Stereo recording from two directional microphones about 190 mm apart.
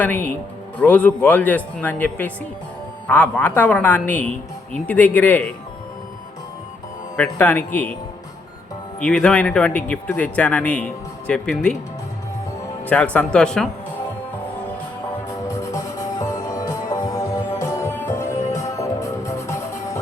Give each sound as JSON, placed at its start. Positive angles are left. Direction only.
{"t": 0.0, "sound": "speech", "side_deg": 10}
{"t": 7.2, "sound": "speech", "side_deg": 10}
{"t": 9.0, "sound": "speech", "side_deg": 5}
{"t": 12.8, "sound": "speech", "side_deg": 5}
{"t": 15.7, "sound": "music", "side_deg": 15}